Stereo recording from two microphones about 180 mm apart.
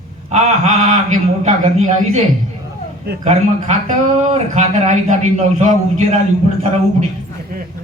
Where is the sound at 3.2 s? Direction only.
40° right (ahead or behind).